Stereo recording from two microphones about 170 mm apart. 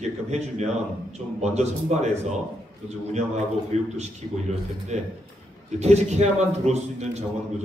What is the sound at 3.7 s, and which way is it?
Speech, 40° right (ahead or behind).